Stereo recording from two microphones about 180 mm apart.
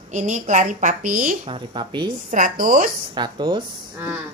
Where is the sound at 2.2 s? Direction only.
45° right (ahead or behind).